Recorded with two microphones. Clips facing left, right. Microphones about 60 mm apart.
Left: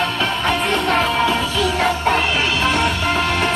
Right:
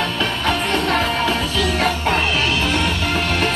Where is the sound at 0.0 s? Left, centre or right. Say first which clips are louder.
Left 1 dB; left.